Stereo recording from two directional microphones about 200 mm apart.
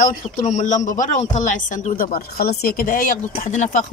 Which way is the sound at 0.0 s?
40° left (ahead or behind).